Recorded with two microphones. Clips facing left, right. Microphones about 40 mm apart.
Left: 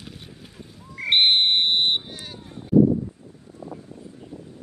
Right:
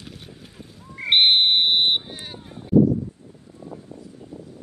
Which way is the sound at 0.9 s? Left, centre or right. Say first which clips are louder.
Right 1 dB; centre.